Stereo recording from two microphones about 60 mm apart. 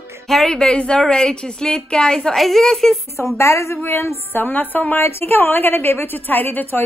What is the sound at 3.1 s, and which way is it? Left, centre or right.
Speech, left.